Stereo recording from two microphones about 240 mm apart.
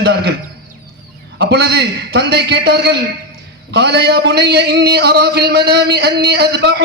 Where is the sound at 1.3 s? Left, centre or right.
Right.